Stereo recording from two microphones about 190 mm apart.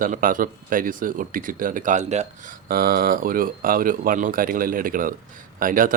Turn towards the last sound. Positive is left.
turn(degrees=-45)  # may be behind; listen again after turning